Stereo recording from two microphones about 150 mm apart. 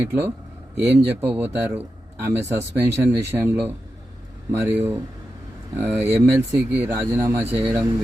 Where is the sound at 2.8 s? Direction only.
15° right (ahead or behind).